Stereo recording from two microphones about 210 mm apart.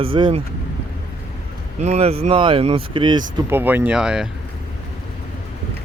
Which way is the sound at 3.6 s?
10° right (ahead or behind).